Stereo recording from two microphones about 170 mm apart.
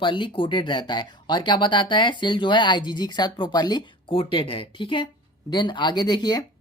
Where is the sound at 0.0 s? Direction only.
30° left (ahead or behind).